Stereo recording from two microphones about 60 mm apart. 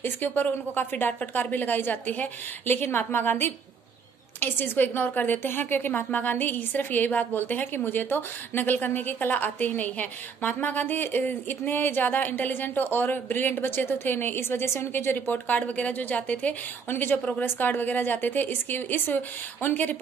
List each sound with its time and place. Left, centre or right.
0.0 s a woman's voice: left
16.9 s a woman's voice: left
17.2 s a woman's voice: left
17.5 s a woman's voice: left